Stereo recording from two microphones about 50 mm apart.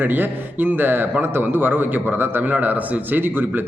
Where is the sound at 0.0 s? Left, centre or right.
Right.